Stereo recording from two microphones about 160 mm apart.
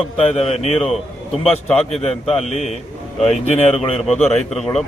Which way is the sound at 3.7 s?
35° left (ahead or behind).